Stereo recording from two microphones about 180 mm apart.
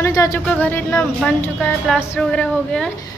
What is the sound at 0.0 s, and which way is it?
Speech, 15° left (ahead or behind).